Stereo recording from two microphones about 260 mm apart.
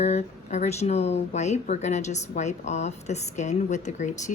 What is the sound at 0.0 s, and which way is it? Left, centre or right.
Speech, left.